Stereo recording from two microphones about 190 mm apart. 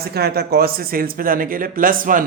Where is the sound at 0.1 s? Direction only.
55° right (ahead or behind).